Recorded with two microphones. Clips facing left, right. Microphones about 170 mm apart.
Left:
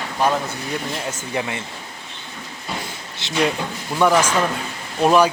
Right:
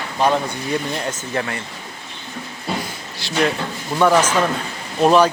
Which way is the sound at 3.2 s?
20° left (ahead or behind).